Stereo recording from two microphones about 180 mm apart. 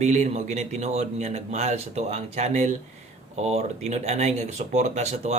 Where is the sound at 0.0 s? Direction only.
40° right (ahead or behind).